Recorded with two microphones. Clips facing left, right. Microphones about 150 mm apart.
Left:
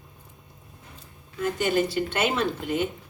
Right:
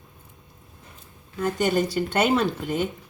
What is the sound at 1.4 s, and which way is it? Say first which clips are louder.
Speech: right 1 dB; 40° right (ahead or behind).